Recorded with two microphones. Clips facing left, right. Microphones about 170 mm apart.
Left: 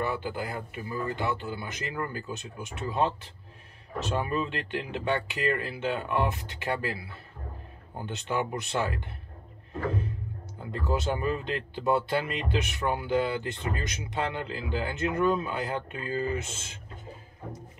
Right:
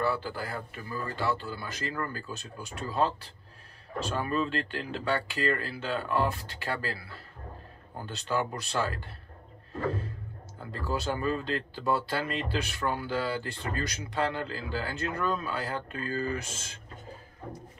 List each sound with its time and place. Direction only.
0.0 s speech: 20° left (ahead or behind)
9.8 s a sound: 20° left (ahead or behind)
10.6 s speech: 20° left (ahead or behind)